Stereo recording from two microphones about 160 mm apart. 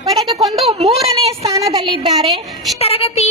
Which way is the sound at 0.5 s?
40° right (ahead or behind).